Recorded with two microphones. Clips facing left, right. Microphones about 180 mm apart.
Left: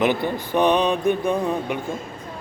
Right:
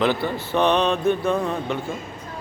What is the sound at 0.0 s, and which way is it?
Speech, 15° left (ahead or behind).